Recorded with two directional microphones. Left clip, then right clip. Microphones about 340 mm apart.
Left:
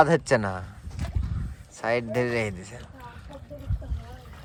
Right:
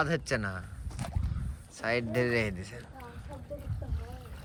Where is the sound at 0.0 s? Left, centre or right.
Centre.